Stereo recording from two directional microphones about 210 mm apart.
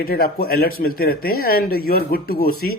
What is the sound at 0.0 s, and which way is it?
Speech, 45° left (ahead or behind).